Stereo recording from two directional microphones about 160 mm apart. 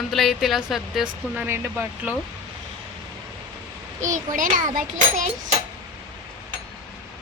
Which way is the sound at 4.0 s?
50° right (ahead or behind).